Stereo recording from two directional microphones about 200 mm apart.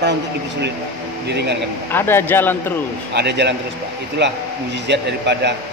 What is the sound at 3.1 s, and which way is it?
Speech, 55° right (ahead or behind).